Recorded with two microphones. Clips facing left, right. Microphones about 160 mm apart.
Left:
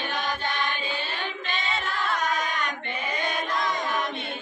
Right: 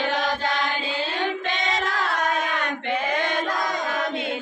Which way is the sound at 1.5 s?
90° right.